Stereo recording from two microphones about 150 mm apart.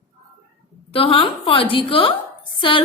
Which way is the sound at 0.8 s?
40° left (ahead or behind).